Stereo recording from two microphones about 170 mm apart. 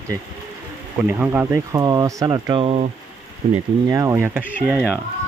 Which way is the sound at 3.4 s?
35° right (ahead or behind).